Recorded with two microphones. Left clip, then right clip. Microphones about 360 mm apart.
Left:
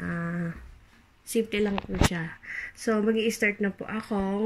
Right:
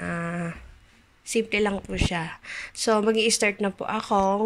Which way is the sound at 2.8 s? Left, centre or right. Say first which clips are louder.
Right 5 dB; right.